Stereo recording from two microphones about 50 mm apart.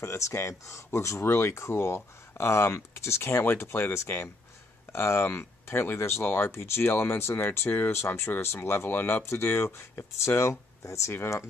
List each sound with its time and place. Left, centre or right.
0.0 s speech: left
1.2 s speech: left
10.8 s speech: left